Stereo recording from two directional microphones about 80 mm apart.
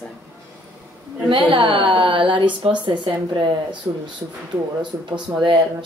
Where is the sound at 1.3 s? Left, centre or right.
Right.